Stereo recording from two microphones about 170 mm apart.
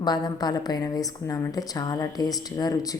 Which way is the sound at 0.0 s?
25° left (ahead or behind).